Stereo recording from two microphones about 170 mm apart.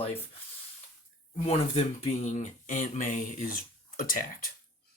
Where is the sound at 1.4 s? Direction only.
40° left (ahead or behind); by 4.3 s 55° left (ahead or behind).